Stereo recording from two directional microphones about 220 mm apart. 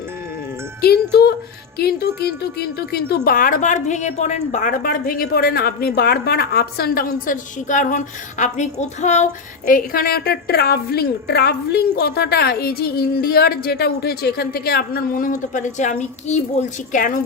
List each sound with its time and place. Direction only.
0.8 s a woman's voice: 45° left (ahead or behind)